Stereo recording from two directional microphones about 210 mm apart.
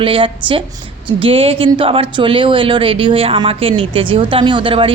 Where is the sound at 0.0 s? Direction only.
25° right (ahead or behind).